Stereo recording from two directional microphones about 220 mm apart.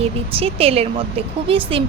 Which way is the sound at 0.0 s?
25° right (ahead or behind).